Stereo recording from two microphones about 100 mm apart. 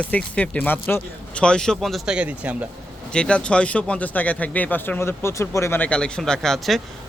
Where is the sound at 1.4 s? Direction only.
10° left (ahead or behind).